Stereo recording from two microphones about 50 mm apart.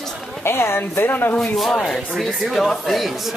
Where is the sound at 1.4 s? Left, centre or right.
Centre.